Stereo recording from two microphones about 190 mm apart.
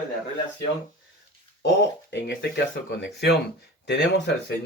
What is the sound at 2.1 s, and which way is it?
Speech, 65° left (ahead or behind).